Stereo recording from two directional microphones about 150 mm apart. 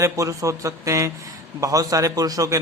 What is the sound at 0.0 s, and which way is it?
A man's voice, 20° right (ahead or behind).